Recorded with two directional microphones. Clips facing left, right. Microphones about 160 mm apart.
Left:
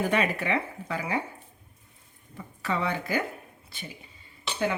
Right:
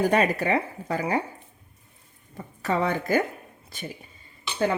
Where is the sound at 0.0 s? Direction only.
40° right (ahead or behind).